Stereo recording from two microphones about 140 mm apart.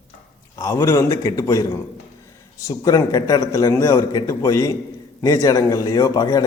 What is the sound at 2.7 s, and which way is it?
A man's voice, 25° left (ahead or behind).